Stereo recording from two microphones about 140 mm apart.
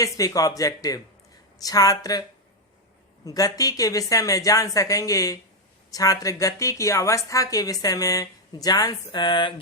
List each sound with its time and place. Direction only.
0.0 s a woman's voice: 25° left (ahead or behind)
3.2 s a woman's voice: 25° left (ahead or behind)